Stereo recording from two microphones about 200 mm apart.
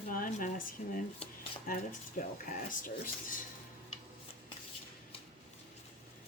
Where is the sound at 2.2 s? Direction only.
40° left (ahead or behind).